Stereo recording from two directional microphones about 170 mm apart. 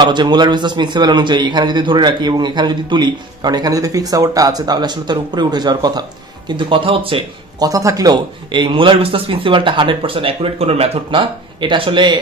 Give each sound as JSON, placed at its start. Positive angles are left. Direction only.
{"t": 0.0, "sound": "a man's voice", "side_deg": -25}